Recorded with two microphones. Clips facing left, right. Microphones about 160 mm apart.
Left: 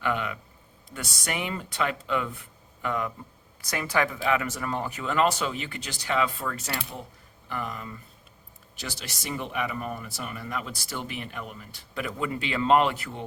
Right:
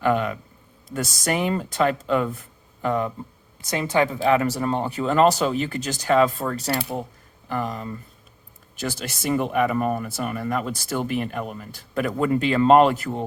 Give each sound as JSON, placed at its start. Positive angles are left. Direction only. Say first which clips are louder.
{"t": 0.0, "sound": "speech", "louder": "right 7 dB", "side_deg": -40}
{"t": 3.6, "sound": "a woman's voice", "louder": "right 5 dB", "side_deg": -25}
{"t": 4.2, "sound": "speech", "louder": "right 7 dB", "side_deg": -40}
{"t": 8.8, "sound": "speech", "louder": "right 9 dB", "side_deg": -50}